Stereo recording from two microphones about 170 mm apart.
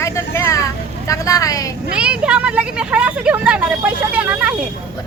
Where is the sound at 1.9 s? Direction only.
5° right (ahead or behind).